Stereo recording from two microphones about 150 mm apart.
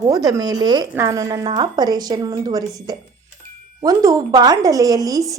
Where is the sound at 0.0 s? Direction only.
25° right (ahead or behind).